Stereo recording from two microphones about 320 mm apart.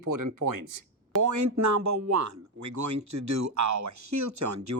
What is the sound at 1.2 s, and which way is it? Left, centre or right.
Speech, right.